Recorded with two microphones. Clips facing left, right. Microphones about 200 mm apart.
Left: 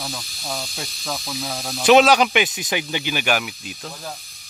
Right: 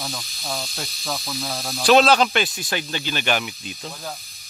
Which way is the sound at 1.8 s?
15° left (ahead or behind).